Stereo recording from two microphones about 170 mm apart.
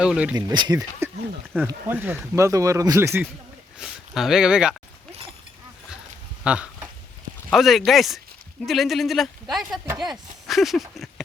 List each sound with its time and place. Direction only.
0.0 s speech: 5° right (ahead or behind)
0.3 s speech: 25° right (ahead or behind)
3.8 s speech: 5° right (ahead or behind)
6.4 s a sound: 5° right (ahead or behind)
7.5 s speech: centre (ahead or behind)
9.8 s speech: 15° right (ahead or behind)
10.1 s speech: centre (ahead or behind)